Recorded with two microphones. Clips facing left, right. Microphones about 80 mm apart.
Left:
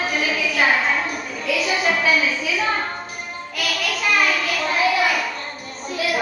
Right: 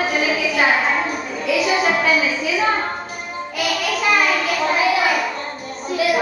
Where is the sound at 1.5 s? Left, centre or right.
Centre.